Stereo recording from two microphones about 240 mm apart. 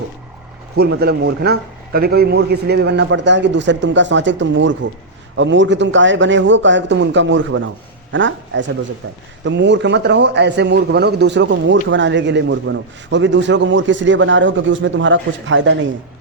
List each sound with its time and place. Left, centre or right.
0.8 s a man's voice: right